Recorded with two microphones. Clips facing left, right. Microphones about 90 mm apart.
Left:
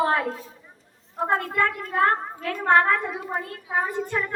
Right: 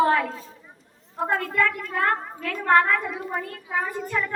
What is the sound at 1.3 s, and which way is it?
A woman's voice, 30° left (ahead or behind).